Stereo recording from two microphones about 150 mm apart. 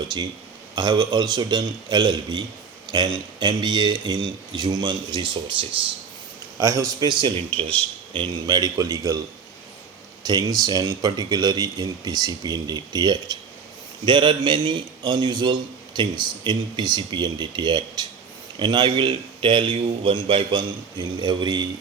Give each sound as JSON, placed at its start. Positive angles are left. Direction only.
{"t": 0.8, "sound": "speech", "side_deg": -30}
{"t": 3.4, "sound": "a man's voice", "side_deg": -30}
{"t": 6.6, "sound": "speech", "side_deg": -20}
{"t": 10.2, "sound": "a man's voice", "side_deg": -25}